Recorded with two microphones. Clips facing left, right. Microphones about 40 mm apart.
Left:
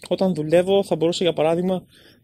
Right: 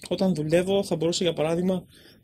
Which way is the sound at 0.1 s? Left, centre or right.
Left.